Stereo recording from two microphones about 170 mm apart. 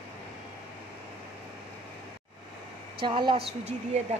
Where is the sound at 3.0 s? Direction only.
30° right (ahead or behind).